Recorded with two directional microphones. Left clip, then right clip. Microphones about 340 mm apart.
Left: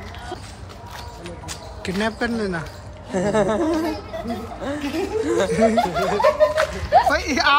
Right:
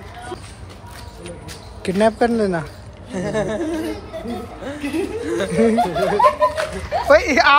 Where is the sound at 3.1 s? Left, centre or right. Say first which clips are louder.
Left 3 dB; left.